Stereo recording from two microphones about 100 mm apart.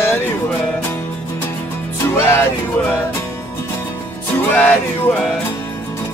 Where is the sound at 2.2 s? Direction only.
25° left (ahead or behind).